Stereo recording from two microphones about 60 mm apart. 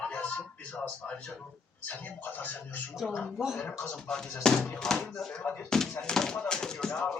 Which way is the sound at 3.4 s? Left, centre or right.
Centre.